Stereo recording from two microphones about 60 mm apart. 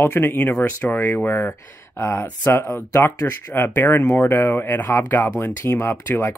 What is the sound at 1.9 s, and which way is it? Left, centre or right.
Speech, left.